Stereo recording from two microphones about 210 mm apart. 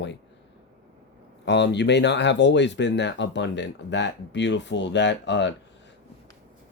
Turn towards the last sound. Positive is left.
turn(degrees=60)  # may be behind; listen again after turning